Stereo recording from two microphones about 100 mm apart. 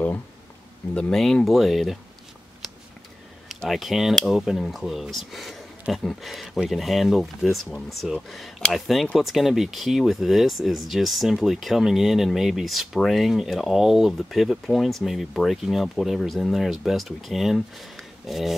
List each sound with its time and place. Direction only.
0.9 s speech: 10° left (ahead or behind)
3.4 s speech: centre (ahead or behind)